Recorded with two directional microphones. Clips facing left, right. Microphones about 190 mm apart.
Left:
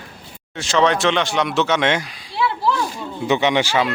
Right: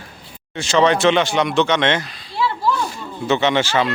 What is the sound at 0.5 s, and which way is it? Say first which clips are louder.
Speech: right 2 dB; centre (ahead or behind).